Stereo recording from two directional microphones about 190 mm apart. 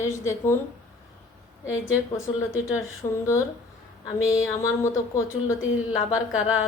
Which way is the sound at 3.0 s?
20° left (ahead or behind).